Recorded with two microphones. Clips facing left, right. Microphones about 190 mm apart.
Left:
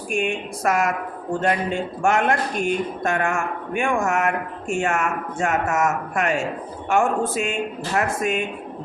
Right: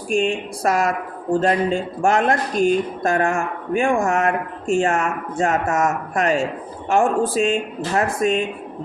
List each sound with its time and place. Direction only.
0.1 s speech: 30° right (ahead or behind)